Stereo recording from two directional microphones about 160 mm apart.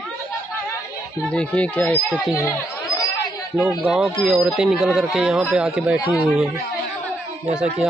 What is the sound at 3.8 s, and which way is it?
Speech, 5° right (ahead or behind).